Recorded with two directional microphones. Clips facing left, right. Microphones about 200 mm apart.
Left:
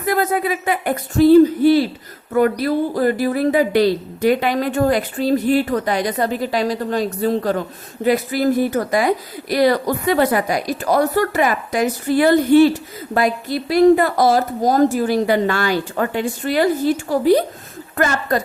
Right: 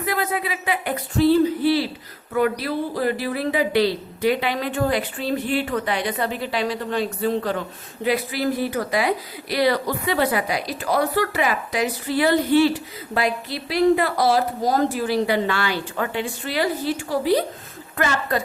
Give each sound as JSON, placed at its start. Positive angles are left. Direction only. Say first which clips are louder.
{"t": 0.0, "sound": "a woman's voice", "louder": "left 6 dB", "side_deg": 45}